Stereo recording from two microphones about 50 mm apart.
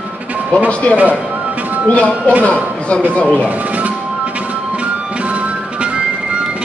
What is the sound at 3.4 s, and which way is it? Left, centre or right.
Speech, right.